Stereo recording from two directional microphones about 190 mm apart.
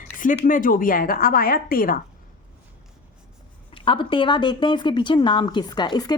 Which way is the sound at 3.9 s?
25° left (ahead or behind).